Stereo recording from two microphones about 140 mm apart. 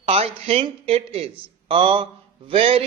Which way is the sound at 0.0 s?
45° right (ahead or behind).